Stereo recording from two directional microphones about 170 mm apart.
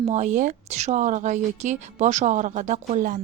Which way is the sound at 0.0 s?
40° right (ahead or behind).